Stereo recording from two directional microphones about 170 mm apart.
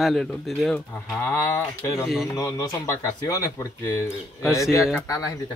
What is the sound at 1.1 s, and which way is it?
Speech, 10° left (ahead or behind).